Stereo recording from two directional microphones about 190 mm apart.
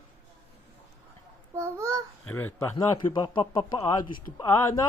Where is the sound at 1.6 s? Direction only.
15° right (ahead or behind).